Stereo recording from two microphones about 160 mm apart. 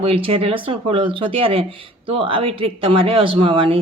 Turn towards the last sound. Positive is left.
turn(degrees=-35)  # may be behind; listen again after turning